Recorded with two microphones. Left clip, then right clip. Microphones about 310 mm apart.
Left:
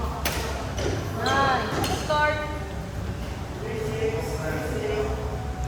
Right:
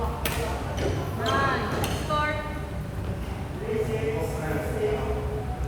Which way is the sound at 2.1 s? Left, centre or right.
Centre.